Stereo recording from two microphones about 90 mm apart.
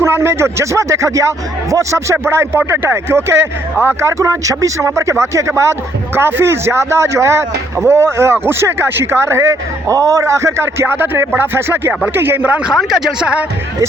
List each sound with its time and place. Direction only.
0.0 s speech: 30° right (ahead or behind); by 13.4 s 10° right (ahead or behind)